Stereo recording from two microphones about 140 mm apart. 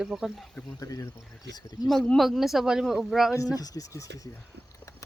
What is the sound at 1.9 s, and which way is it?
Speech, centre (ahead or behind).